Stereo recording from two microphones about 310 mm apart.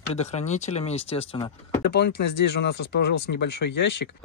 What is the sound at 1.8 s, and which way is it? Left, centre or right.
Speech, left.